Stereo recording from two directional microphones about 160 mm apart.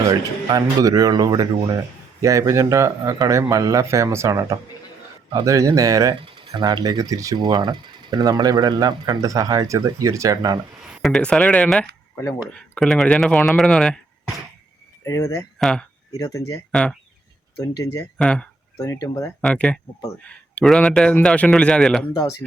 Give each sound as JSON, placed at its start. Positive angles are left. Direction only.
{"t": 0.0, "sound": "speech", "side_deg": -25}
{"t": 10.8, "sound": "a man's voice", "side_deg": 0}
{"t": 15.0, "sound": "speech", "side_deg": 20}
{"t": 15.5, "sound": "speech", "side_deg": 5}
{"t": 16.1, "sound": "speech", "side_deg": 20}
{"t": 16.7, "sound": "a man's voice", "side_deg": 5}
{"t": 17.6, "sound": "speech", "side_deg": 20}
{"t": 18.2, "sound": "a man's voice", "side_deg": 5}
{"t": 18.8, "sound": "speech", "side_deg": 25}
{"t": 19.4, "sound": "a man's voice", "side_deg": 5}